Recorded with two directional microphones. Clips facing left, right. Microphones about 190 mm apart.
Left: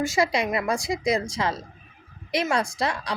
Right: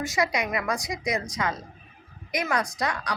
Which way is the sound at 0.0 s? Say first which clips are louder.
Left 3 dB; 25° left (ahead or behind).